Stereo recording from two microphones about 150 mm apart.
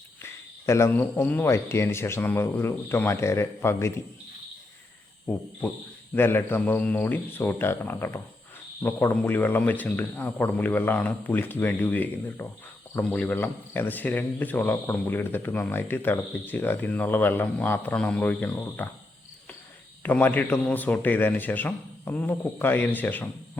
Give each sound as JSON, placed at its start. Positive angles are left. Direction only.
{"t": 0.2, "sound": "a man's voice", "side_deg": 20}
{"t": 6.1, "sound": "a man's voice", "side_deg": 15}
{"t": 20.0, "sound": "a man's voice", "side_deg": 10}